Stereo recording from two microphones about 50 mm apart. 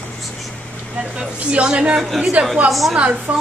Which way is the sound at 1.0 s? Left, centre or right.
Centre.